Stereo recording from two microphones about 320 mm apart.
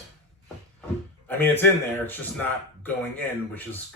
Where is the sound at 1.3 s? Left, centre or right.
Centre.